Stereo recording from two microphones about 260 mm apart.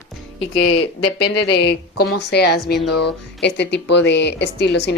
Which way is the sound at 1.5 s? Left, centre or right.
Left.